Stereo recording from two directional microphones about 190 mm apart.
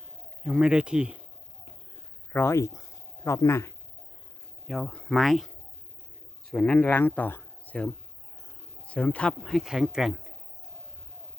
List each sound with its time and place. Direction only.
0.4 s speech: 5° right (ahead or behind)
2.3 s speech: 15° left (ahead or behind)
4.6 s speech: centre (ahead or behind)
6.5 s speech: 5° left (ahead or behind)